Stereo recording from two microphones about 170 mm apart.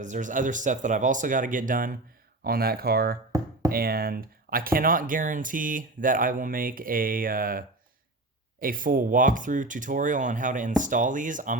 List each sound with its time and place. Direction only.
0.0 s speech: 45° right (ahead or behind)